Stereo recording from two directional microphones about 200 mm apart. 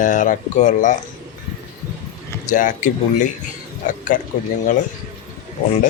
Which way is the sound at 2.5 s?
40° left (ahead or behind).